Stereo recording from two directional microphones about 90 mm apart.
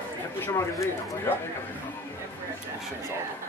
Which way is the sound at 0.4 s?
35° left (ahead or behind).